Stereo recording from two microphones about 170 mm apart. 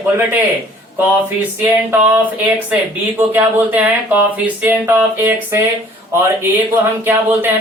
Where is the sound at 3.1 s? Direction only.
10° right (ahead or behind).